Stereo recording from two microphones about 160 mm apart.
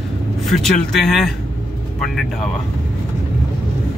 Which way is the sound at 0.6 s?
Centre (ahead or behind).